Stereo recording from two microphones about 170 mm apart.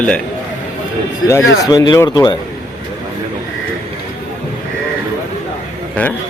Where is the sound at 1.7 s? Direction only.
20° left (ahead or behind).